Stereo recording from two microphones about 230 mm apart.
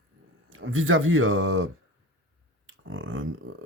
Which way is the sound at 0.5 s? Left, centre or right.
Right.